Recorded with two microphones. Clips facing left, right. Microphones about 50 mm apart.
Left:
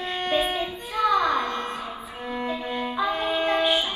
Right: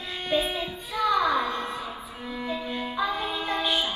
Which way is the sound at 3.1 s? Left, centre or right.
Left.